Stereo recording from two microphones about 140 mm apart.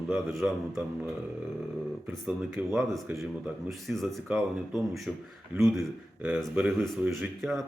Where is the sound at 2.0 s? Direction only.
10° right (ahead or behind).